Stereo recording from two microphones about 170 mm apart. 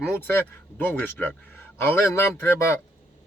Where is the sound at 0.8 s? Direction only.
10° left (ahead or behind).